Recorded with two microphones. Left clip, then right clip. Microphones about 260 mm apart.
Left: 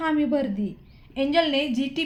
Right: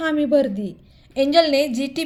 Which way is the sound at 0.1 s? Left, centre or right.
Right.